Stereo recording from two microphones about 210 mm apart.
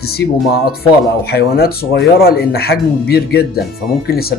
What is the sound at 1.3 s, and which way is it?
A man's voice, 50° left (ahead or behind).